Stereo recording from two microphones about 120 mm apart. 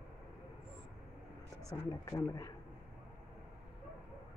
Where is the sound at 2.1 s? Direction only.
30° left (ahead or behind).